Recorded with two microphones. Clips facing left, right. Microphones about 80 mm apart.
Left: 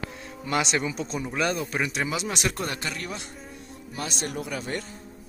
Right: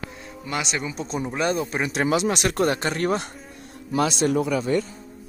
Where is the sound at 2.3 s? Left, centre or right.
Right.